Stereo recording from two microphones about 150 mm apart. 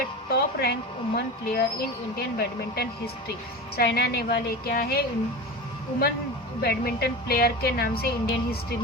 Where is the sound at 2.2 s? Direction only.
90° left.